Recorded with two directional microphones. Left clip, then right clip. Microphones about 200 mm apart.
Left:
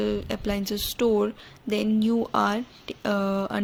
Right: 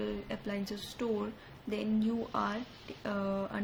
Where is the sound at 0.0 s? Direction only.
50° left (ahead or behind).